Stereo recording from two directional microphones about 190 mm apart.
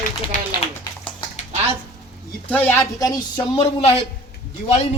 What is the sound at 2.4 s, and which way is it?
A man's voice, 10° left (ahead or behind).